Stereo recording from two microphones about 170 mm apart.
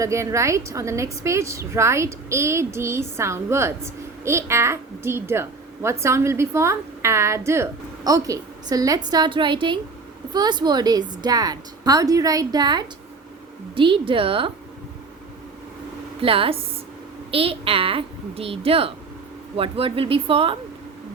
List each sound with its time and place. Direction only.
0.0 s a child's voice: 15° right (ahead or behind)
16.2 s a woman's voice: 35° right (ahead or behind)